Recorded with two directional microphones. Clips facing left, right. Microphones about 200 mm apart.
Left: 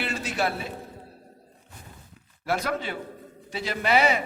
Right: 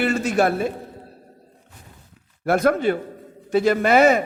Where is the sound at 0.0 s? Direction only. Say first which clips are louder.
Right 9 dB; 50° right (ahead or behind).